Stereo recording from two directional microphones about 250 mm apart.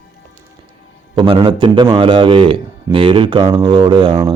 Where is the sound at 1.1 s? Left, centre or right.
Right.